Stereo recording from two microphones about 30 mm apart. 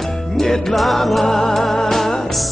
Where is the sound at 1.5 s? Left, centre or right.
Centre.